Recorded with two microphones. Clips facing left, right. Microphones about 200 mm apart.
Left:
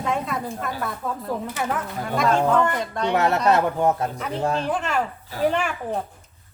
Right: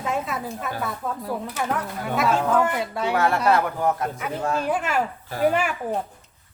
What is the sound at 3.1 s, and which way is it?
Speech, 20° left (ahead or behind).